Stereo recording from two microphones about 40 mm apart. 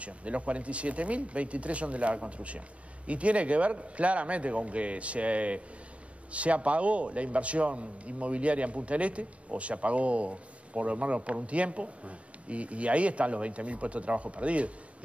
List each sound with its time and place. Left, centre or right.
0.0 s a man's voice: right